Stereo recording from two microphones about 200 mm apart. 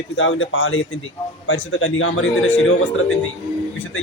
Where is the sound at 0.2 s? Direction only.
70° left (ahead or behind).